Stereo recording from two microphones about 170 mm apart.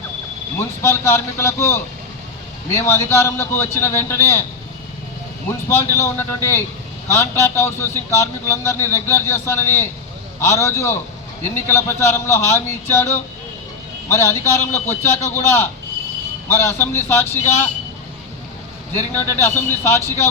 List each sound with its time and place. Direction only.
0.6 s a man's voice: 15° left (ahead or behind)
5.5 s a man's voice: 15° left (ahead or behind)
18.9 s a man's voice: 10° left (ahead or behind)